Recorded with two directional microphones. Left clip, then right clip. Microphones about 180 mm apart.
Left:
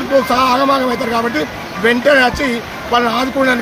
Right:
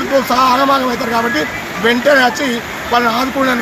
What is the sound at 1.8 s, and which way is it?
Speech, 20° left (ahead or behind).